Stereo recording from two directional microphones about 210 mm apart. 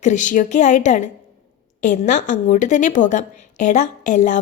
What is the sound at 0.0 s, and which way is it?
A woman's voice, 35° left (ahead or behind).